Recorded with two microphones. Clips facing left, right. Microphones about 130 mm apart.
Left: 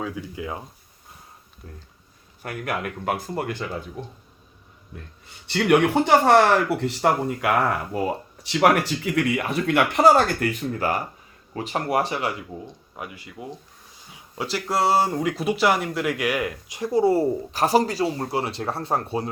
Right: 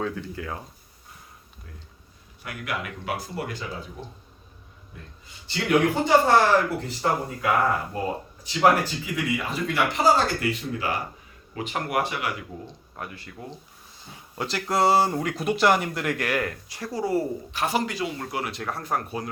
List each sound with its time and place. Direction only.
0.0 s speech: 10° left (ahead or behind)
2.4 s speech: 50° left (ahead or behind)
5.5 s speech: 70° left (ahead or behind); by 11.0 s 45° left (ahead or behind)
11.5 s speech: 35° left (ahead or behind)
12.6 s speech: 15° left (ahead or behind)
14.3 s speech: 5° left (ahead or behind); by 19.3 s 30° left (ahead or behind)